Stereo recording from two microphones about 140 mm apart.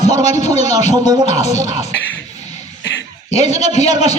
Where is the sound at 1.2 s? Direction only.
50° left (ahead or behind).